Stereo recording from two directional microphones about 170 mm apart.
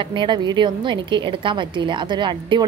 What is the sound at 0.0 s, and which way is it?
A woman's voice, 30° right (ahead or behind).